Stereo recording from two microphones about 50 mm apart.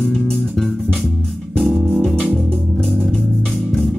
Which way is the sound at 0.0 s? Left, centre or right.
Centre.